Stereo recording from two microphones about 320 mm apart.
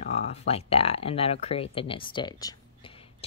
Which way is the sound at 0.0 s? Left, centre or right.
Centre.